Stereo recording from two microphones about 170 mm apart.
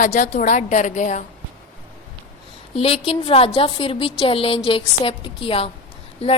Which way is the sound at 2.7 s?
35° left (ahead or behind).